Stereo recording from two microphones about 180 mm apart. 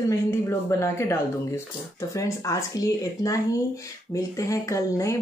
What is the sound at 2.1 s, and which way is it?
Speech, 15° left (ahead or behind).